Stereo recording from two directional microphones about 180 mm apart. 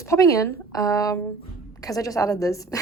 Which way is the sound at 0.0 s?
15° left (ahead or behind).